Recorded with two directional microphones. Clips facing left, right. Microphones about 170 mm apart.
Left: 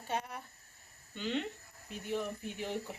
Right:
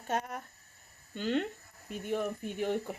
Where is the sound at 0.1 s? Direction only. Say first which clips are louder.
Right 4 dB; 45° right (ahead or behind).